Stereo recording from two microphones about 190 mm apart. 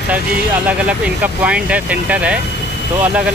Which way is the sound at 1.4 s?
5° right (ahead or behind).